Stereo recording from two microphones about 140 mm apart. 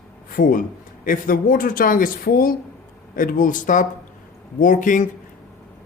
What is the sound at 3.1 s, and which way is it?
Speech, 75° left (ahead or behind).